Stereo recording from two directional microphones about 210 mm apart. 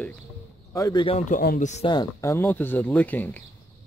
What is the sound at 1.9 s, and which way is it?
Speech, 15° left (ahead or behind).